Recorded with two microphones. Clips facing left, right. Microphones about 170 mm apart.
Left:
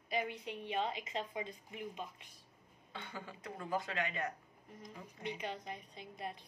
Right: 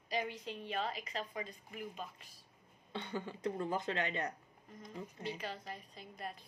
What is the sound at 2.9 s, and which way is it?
Speech, 30° right (ahead or behind).